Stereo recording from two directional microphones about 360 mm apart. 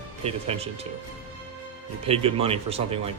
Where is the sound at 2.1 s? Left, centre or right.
Centre.